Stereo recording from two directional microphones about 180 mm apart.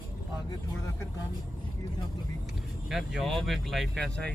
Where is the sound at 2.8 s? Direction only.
Centre (ahead or behind).